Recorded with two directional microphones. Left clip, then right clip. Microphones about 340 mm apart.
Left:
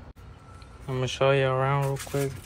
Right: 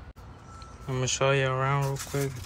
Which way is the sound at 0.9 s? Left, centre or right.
Centre.